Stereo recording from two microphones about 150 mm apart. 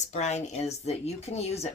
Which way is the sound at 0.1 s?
50° left (ahead or behind).